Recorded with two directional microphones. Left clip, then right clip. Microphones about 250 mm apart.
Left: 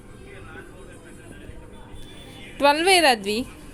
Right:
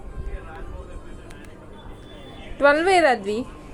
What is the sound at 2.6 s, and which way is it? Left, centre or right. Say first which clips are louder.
Speech: right 1 dB; left.